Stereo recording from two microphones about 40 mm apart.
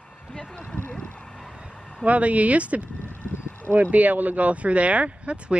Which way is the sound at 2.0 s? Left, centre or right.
Right.